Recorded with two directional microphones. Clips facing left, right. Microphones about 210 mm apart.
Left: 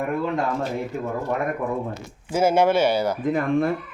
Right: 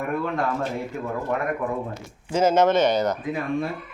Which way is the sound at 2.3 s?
10° left (ahead or behind).